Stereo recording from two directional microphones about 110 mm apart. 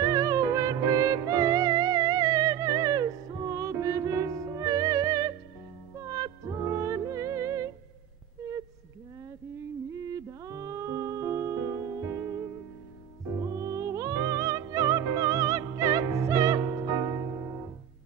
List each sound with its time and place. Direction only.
0.0 s music: 30° right (ahead or behind)
9.9 s music: 30° right (ahead or behind)
13.4 s music: 35° right (ahead or behind)